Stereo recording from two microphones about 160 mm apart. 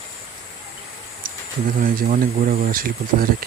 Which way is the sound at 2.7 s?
60° right (ahead or behind).